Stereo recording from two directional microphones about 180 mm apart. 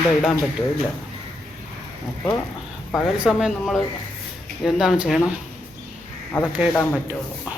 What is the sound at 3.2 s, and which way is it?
Speech, centre (ahead or behind).